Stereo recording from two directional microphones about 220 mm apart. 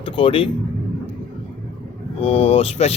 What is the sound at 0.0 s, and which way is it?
Speech, 25° left (ahead or behind).